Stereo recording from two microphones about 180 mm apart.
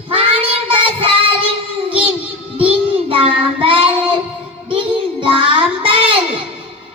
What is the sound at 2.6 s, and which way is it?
Child singing, 30° right (ahead or behind).